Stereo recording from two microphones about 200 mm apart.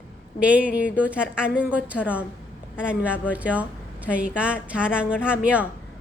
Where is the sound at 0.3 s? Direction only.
5° right (ahead or behind).